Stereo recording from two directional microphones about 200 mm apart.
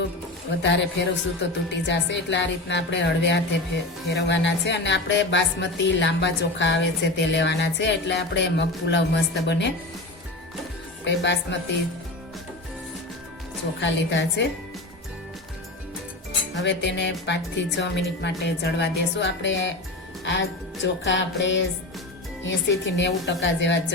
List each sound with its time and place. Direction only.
0.6 s speech: 60° left (ahead or behind)
11.0 s speech: 60° left (ahead or behind)
13.8 s speech: 65° left (ahead or behind)
16.6 s speech: 60° left (ahead or behind)
20.8 s music: 65° left (ahead or behind)
22.4 s speech: 65° left (ahead or behind)